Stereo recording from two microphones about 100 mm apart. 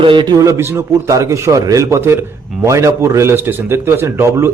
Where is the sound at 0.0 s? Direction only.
55° right (ahead or behind).